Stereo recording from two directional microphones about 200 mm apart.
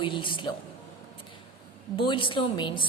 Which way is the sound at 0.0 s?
25° left (ahead or behind).